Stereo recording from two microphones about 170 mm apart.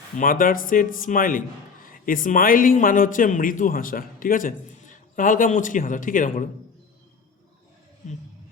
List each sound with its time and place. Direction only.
0.2 s a man's voice: 55° left (ahead or behind)